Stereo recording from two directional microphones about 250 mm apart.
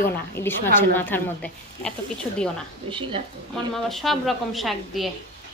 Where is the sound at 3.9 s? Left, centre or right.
Centre.